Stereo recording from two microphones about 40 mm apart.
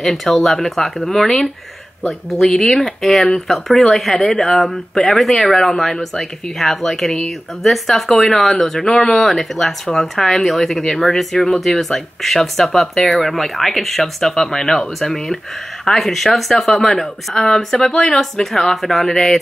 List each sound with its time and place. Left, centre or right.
0.0 s speech: centre
2.5 s speech: centre
11.3 s speech: centre
11.6 s speech: centre